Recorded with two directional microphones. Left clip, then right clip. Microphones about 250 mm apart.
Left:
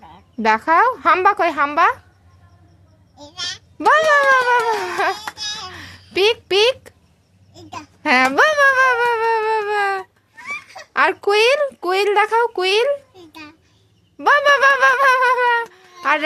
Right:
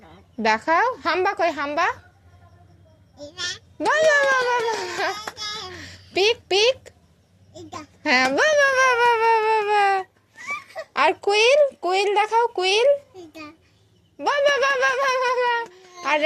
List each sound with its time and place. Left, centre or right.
0.1 s speech: centre
3.8 s speech: centre
5.6 s a sound: centre
7.8 s a child's voice: centre
10.5 s a child's voice: centre